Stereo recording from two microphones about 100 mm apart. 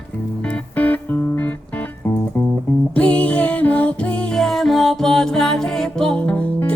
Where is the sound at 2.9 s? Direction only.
15° left (ahead or behind).